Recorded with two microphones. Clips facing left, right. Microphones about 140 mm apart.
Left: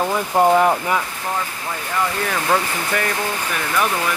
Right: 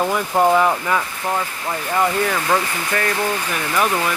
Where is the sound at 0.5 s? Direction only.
25° left (ahead or behind).